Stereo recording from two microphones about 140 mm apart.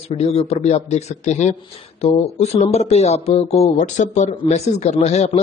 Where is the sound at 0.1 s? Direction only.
50° left (ahead or behind).